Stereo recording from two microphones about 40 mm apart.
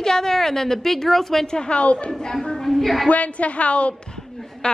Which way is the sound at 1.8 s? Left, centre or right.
Left.